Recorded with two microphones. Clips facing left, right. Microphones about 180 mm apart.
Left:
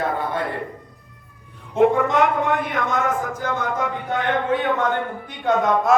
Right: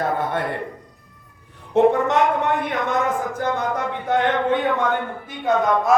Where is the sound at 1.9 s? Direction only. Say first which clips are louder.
Even; 70° right (ahead or behind).